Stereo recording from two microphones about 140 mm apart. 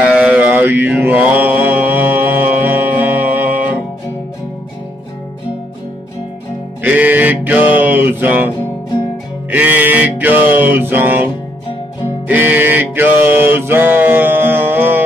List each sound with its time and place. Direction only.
0.0 s mantra: 10° right (ahead or behind)
6.8 s music: 10° right (ahead or behind)
9.5 s music: 10° right (ahead or behind)
12.3 s music: 15° right (ahead or behind)